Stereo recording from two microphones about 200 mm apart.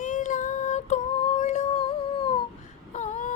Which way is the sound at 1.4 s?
35° left (ahead or behind).